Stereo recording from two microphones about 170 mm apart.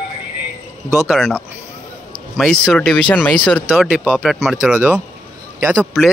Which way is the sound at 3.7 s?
5° right (ahead or behind).